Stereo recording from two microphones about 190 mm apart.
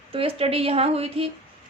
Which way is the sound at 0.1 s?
30° right (ahead or behind).